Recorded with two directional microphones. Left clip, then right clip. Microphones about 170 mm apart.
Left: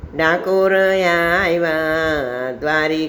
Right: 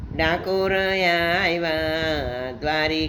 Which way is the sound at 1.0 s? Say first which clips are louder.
Left 5 dB; 15° right (ahead or behind).